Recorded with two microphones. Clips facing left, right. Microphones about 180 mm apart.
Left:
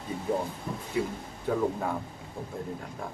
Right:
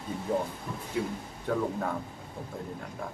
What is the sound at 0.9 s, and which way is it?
Speech, 5° left (ahead or behind).